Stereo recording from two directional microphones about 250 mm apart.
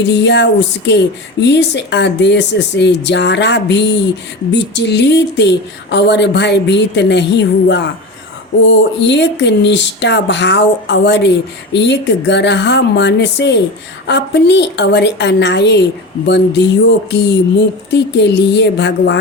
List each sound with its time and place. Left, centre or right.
0.0 s speech: left
17.9 s speech: left